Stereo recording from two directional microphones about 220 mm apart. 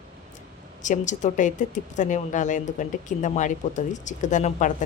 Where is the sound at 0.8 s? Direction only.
35° left (ahead or behind).